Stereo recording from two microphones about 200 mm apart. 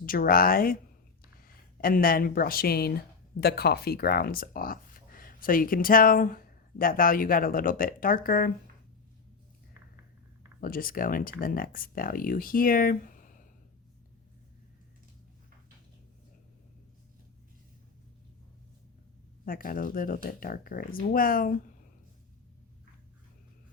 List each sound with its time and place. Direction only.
0.0 s speech: 45° left (ahead or behind)
10.6 s speech: 45° left (ahead or behind)
19.5 s speech: 45° left (ahead or behind)